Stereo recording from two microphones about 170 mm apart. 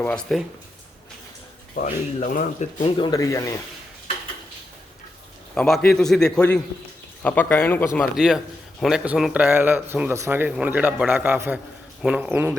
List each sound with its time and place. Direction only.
0.0 s a man's voice: 5° left (ahead or behind)
1.7 s speech: 50° left (ahead or behind)
3.0 s speech: 20° left (ahead or behind)
5.5 s a man's voice: 5° left (ahead or behind)
8.1 s a man's voice: 5° right (ahead or behind)